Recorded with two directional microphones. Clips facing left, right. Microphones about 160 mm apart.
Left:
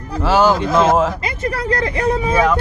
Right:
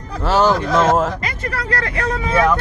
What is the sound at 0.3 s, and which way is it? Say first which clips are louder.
Speech: left 1 dB; 5° left (ahead or behind).